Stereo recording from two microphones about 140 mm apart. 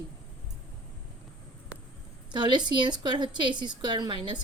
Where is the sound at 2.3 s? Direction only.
30° right (ahead or behind).